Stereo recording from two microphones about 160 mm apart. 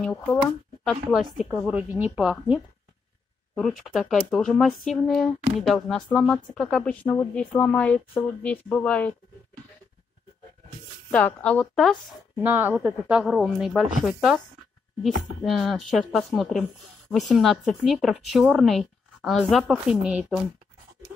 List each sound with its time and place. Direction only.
0.8 s speech: 5° right (ahead or behind)
11.1 s speech: 10° left (ahead or behind)
12.4 s speech: 10° right (ahead or behind)